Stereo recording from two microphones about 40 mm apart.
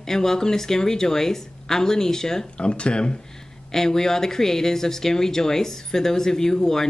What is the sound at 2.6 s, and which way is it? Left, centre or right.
Speech, left.